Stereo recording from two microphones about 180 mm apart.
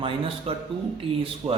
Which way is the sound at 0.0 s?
30° right (ahead or behind).